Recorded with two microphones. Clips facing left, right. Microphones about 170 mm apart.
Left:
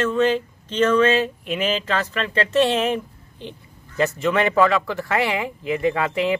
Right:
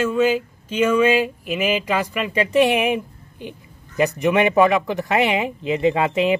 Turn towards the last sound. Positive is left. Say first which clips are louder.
# right 3 dB
turn(degrees=-20)  # may be behind; listen again after turning